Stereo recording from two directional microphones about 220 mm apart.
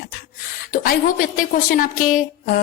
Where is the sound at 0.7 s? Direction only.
40° left (ahead or behind).